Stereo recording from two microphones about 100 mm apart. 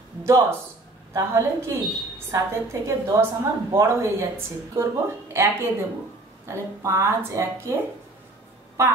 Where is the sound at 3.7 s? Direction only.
25° right (ahead or behind).